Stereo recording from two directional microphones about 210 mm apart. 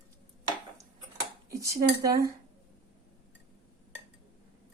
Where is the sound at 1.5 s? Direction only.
15° right (ahead or behind).